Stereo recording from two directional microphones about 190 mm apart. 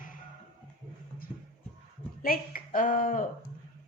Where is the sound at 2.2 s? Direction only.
50° left (ahead or behind).